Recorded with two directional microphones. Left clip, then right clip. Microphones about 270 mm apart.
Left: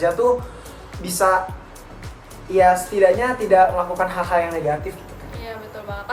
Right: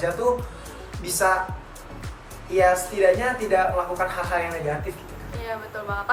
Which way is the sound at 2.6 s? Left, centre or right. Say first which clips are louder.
Left 5 dB; centre.